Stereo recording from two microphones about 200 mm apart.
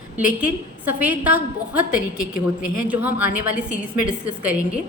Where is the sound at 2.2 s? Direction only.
45° left (ahead or behind).